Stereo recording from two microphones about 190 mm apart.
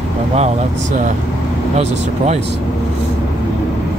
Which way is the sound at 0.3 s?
35° right (ahead or behind).